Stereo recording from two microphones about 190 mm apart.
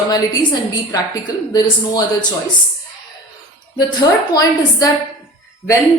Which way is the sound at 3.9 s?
20° left (ahead or behind).